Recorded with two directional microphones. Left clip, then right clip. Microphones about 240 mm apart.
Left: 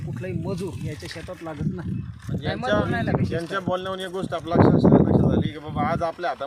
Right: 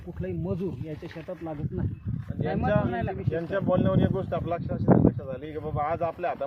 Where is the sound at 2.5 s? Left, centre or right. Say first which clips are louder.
Left 4 dB; centre.